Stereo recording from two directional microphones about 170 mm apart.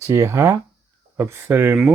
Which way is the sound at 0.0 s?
15° right (ahead or behind).